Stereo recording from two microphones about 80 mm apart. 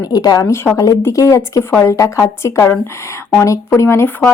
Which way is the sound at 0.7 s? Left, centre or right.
Left.